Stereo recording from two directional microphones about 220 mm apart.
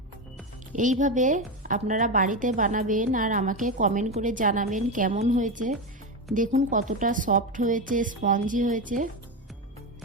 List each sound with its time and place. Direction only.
0.7 s a woman's voice: 35° right (ahead or behind)